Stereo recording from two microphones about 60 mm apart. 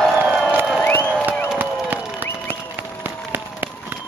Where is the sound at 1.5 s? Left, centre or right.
Right.